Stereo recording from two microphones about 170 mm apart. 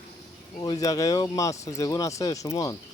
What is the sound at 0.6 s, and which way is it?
Speech, 20° left (ahead or behind).